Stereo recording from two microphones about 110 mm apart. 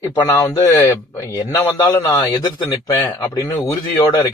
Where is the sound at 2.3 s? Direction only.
45° left (ahead or behind).